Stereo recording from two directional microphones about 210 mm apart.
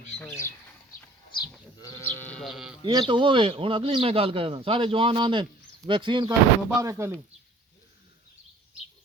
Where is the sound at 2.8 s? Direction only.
25° right (ahead or behind).